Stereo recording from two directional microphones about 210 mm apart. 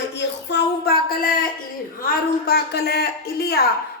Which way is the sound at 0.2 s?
55° left (ahead or behind).